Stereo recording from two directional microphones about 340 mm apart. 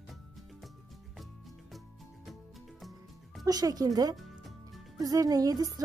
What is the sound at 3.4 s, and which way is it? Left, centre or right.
Speech, centre.